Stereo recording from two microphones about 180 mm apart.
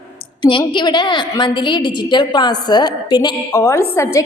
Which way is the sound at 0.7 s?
25° left (ahead or behind).